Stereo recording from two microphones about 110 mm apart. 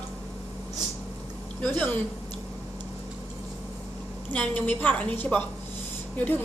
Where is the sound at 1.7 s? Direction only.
15° left (ahead or behind).